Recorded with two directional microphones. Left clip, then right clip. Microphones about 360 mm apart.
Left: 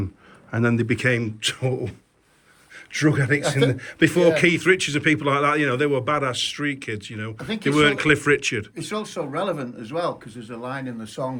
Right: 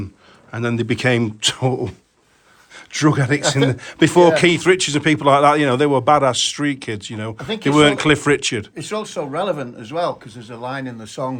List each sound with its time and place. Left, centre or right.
0.5 s a man's voice: centre
7.3 s speech: right
7.6 s speech: centre
8.7 s speech: right